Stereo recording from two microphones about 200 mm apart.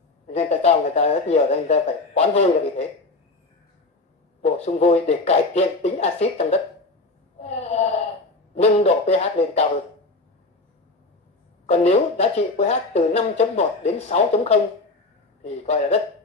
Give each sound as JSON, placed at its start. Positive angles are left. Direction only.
{"t": 0.3, "sound": "a man's voice", "side_deg": 35}
{"t": 4.4, "sound": "a man's voice", "side_deg": 35}
{"t": 7.4, "sound": "a sound", "side_deg": 30}
{"t": 8.8, "sound": "a man's voice", "side_deg": 30}
{"t": 11.6, "sound": "a man's voice", "side_deg": 35}